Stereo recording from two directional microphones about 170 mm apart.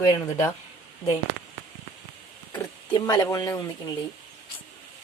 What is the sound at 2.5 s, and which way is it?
Speech, 25° left (ahead or behind).